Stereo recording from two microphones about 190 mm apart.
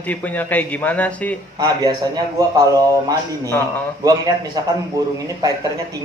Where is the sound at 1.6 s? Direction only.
20° right (ahead or behind).